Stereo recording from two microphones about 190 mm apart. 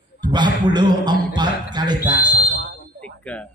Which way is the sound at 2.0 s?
45° right (ahead or behind).